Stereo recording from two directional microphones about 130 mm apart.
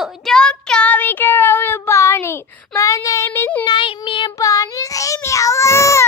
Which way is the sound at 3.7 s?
35° left (ahead or behind).